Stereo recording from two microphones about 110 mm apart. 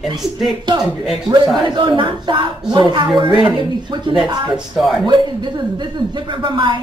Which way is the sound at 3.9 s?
45° right (ahead or behind).